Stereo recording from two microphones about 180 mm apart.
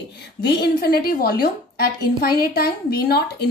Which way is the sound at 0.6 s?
55° left (ahead or behind).